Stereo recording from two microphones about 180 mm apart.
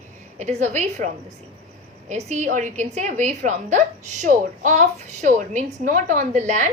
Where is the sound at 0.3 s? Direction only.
40° right (ahead or behind).